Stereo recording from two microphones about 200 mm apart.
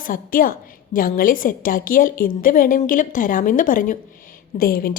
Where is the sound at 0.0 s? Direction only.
45° left (ahead or behind).